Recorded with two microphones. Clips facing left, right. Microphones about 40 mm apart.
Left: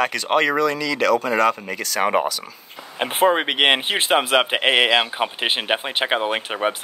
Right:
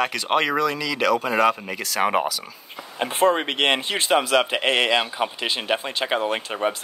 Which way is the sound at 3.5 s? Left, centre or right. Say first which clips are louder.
Left 3 dB; left.